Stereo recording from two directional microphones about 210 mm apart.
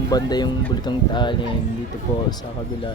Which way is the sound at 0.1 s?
20° left (ahead or behind).